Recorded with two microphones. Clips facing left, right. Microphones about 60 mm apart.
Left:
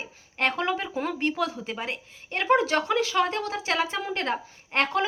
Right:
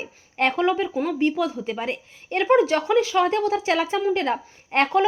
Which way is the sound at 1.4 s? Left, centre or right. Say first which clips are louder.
Right 4 dB; centre.